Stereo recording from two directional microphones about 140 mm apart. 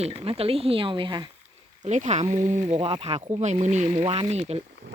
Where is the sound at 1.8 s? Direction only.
60° right (ahead or behind).